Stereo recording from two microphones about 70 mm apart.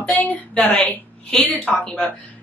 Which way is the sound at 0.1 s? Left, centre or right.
Left.